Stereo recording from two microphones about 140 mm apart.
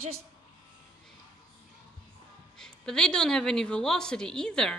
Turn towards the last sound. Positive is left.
turn(degrees=5)  # may be behind; listen again after turning